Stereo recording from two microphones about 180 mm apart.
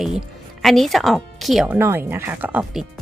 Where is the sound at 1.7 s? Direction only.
15° right (ahead or behind).